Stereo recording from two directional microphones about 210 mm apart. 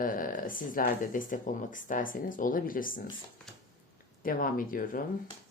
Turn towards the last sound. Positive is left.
turn(degrees=40)  # may be behind; listen again after turning